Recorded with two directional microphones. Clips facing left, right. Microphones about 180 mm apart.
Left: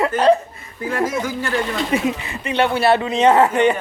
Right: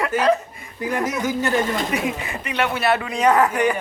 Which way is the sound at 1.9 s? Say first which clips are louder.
Left 4 dB; 25° left (ahead or behind).